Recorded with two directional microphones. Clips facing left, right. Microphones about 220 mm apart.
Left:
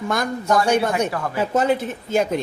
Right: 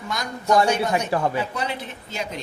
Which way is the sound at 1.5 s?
45° left (ahead or behind).